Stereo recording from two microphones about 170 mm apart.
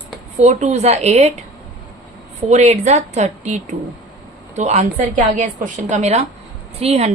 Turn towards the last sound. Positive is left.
turn(degrees=-35)  # may be behind; listen again after turning